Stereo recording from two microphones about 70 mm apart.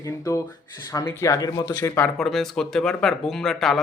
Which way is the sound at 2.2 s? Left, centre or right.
Centre.